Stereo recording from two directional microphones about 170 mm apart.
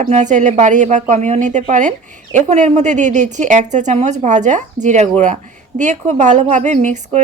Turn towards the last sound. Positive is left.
turn(degrees=-45)  # may be behind; listen again after turning